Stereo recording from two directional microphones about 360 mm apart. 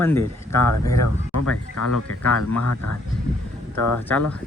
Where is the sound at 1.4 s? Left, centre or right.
Left.